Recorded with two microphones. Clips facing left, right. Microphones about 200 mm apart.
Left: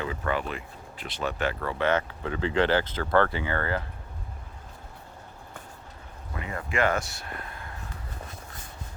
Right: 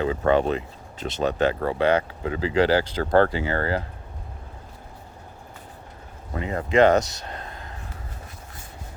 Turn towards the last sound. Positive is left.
turn(degrees=-20)  # may be behind; listen again after turning